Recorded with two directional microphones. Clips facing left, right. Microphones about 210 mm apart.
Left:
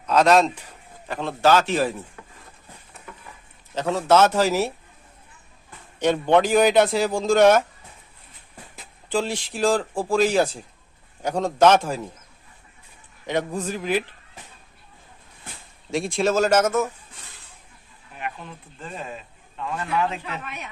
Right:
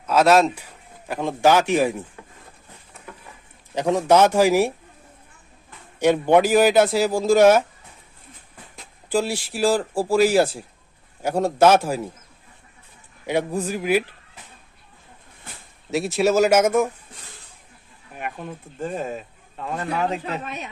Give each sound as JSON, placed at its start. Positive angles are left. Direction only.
{"t": 0.0, "sound": "speech", "side_deg": -5}
{"t": 3.8, "sound": "speech", "side_deg": -15}
{"t": 6.0, "sound": "a man's voice", "side_deg": -10}
{"t": 8.7, "sound": "speech", "side_deg": -5}
{"t": 13.2, "sound": "speech", "side_deg": -10}
{"t": 15.9, "sound": "speech", "side_deg": -5}
{"t": 18.1, "sound": "speech", "side_deg": -50}